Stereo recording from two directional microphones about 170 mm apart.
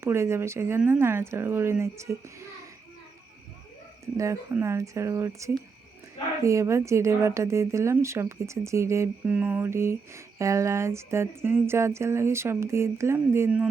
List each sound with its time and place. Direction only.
0.0 s speech: 15° right (ahead or behind)
4.0 s speech: 20° right (ahead or behind)